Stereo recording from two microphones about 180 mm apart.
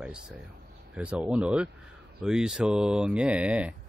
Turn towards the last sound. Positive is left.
turn(degrees=-5)  # may be behind; listen again after turning